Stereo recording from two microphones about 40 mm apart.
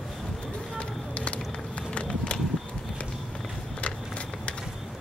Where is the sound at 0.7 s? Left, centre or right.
Left.